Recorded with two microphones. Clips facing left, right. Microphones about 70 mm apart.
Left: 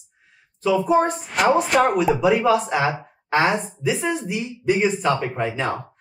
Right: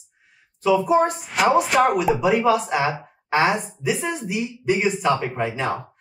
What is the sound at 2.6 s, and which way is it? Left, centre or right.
Speech, centre.